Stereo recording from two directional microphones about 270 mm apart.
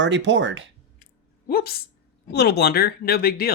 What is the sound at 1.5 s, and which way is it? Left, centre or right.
Speech, left.